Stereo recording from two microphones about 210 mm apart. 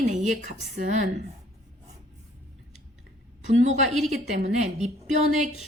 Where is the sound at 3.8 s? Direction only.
Centre (ahead or behind).